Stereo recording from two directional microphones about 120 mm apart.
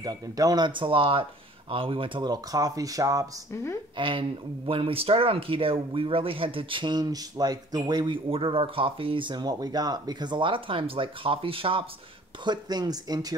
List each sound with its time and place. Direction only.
0.0 s speech: 30° right (ahead or behind)
3.9 s speech: 45° right (ahead or behind)
12.4 s speech: 35° right (ahead or behind)